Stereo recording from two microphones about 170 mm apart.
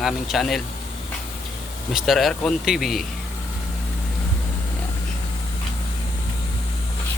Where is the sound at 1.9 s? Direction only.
Centre (ahead or behind).